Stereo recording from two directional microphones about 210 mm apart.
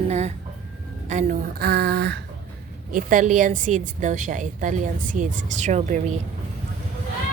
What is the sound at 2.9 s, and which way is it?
Speech, 40° right (ahead or behind).